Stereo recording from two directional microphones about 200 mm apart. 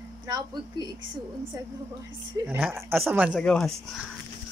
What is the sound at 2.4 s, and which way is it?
Speech, 10° right (ahead or behind).